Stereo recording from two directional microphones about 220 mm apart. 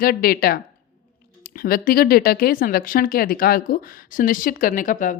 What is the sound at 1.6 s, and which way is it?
Speech, 40° left (ahead or behind).